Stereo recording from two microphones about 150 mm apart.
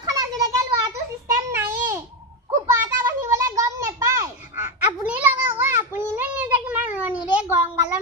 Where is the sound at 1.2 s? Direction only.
15° right (ahead or behind).